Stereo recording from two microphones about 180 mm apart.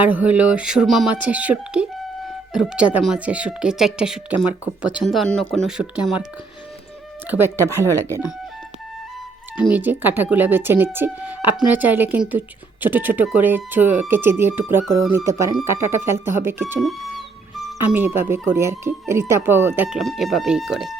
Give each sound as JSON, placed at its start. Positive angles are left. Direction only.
{"t": 0.0, "sound": "speech", "side_deg": -10}
{"t": 7.3, "sound": "speech", "side_deg": -10}
{"t": 7.5, "sound": "speech", "side_deg": 15}
{"t": 9.6, "sound": "speech", "side_deg": -10}
{"t": 16.8, "sound": "music", "side_deg": 0}
{"t": 17.7, "sound": "speech", "side_deg": -10}